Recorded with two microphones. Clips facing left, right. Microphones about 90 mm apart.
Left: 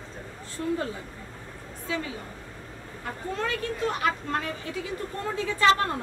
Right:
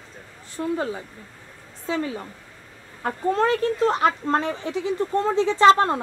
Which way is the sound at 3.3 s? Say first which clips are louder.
Right 9 dB; 40° right (ahead or behind).